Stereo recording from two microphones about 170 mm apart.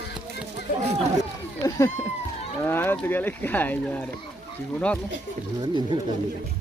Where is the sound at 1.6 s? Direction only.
15° left (ahead or behind).